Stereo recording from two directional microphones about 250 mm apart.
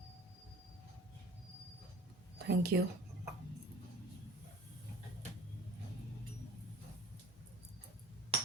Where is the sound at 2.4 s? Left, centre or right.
Right.